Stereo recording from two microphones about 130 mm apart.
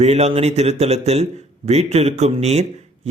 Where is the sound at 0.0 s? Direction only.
55° right (ahead or behind).